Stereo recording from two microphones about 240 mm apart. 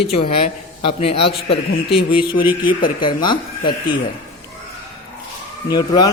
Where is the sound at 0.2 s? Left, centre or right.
Left.